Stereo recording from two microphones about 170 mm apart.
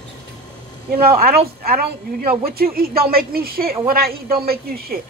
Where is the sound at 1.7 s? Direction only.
60° right (ahead or behind).